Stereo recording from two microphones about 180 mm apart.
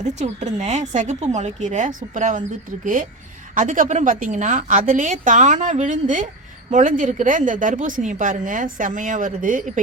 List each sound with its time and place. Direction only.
0.0 s a woman's voice: 40° right (ahead or behind)